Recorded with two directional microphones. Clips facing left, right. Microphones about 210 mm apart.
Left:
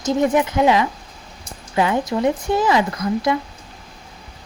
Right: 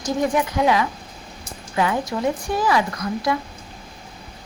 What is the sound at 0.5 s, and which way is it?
Speech, 25° left (ahead or behind).